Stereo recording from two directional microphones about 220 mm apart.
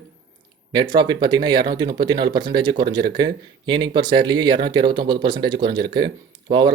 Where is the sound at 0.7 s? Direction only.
20° right (ahead or behind).